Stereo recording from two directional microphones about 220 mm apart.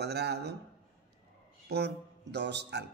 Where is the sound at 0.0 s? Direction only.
50° right (ahead or behind).